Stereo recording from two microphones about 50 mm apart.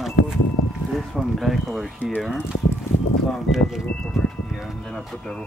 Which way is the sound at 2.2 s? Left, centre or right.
Centre.